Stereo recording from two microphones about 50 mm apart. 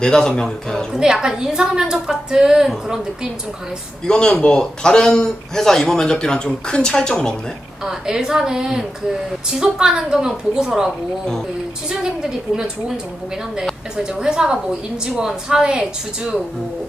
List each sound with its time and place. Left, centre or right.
0.0 s a man's voice: centre
0.9 s a woman's voice: centre
4.0 s a man's voice: centre
7.9 s a woman's voice: centre
10.6 s a woman's voice: centre
13.9 s a woman's voice: centre